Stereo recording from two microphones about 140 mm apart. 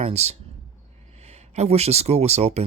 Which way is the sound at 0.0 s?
50° right (ahead or behind).